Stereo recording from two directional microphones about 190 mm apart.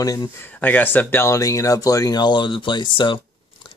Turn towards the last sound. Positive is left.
turn(degrees=25)  # may be behind; listen again after turning